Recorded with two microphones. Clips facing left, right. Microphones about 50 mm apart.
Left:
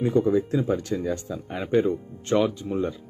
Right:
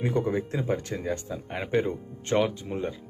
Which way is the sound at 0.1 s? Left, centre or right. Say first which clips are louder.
Left 6 dB; right.